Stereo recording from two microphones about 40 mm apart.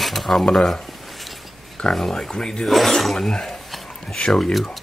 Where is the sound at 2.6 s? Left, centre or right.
Centre.